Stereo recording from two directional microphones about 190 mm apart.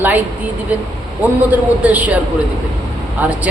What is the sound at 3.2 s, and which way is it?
Speech, 10° right (ahead or behind).